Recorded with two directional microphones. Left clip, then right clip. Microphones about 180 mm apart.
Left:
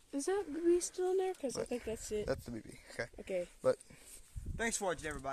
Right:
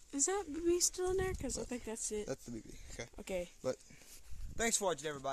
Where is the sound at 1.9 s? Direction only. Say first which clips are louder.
Left 2 dB; 20° right (ahead or behind).